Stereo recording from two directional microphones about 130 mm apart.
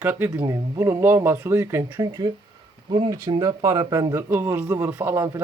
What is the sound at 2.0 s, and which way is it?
Speech, 35° right (ahead or behind).